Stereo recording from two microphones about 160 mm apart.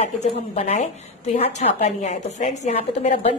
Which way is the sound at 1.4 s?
40° left (ahead or behind).